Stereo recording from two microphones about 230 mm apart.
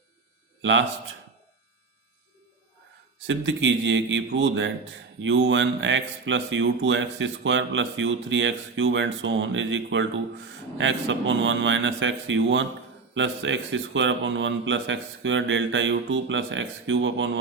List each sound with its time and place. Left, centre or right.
0.6 s a man's voice: right
3.2 s speech: right